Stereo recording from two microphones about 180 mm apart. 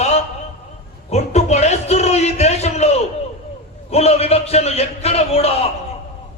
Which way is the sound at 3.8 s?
35° left (ahead or behind).